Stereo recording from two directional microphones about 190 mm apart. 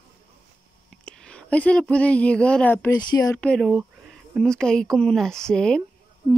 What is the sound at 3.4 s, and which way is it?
Speech, centre (ahead or behind).